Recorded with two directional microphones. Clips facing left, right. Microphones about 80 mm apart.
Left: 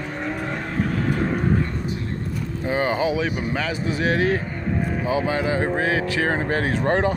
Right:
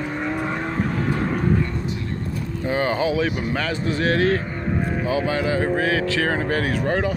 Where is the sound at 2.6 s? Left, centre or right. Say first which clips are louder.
Even; centre.